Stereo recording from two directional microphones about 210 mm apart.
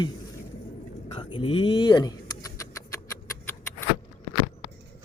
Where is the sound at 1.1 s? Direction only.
25° left (ahead or behind).